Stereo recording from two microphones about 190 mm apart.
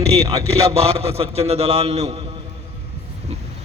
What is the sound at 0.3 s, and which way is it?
Speech, 15° right (ahead or behind).